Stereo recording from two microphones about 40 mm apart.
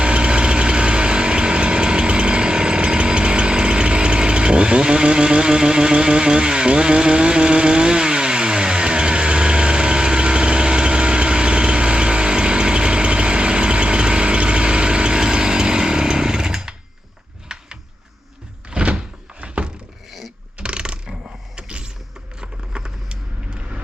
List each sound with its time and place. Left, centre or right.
0.0 s vehicle: right
17.5 s a sound: centre
18.7 s thunk: right
20.1 s vehicle: centre
20.6 s mechanisms: right
21.5 s a sound: right